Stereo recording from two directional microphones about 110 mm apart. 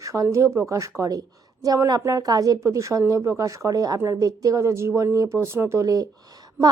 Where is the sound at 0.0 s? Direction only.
30° right (ahead or behind).